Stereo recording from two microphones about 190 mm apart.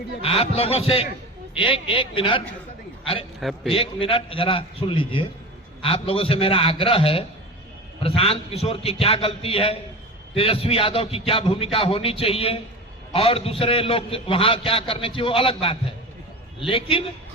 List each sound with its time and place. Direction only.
0.2 s a man's voice: 30° left (ahead or behind)
3.7 s a man's voice: 30° left (ahead or behind)